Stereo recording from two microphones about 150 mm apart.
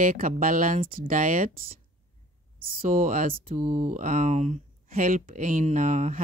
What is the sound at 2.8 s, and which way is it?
Speech, 65° right (ahead or behind).